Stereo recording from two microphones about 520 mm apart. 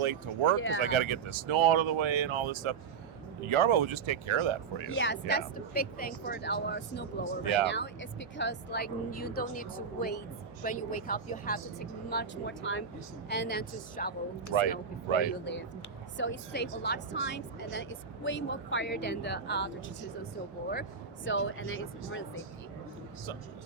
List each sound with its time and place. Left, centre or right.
0.0 s speech: right
0.5 s speech: left
0.8 s speech: right
4.9 s speech: left
8.4 s speech: centre
14.5 s speech: right
15.2 s speech: centre
21.2 s speech: left